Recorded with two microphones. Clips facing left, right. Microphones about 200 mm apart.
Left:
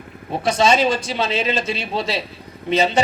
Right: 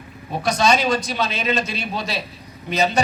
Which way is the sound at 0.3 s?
25° left (ahead or behind).